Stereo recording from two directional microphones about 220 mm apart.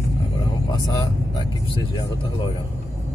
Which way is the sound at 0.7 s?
15° left (ahead or behind).